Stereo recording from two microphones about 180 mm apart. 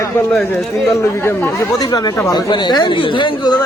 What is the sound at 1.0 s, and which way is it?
Speech, 15° left (ahead or behind).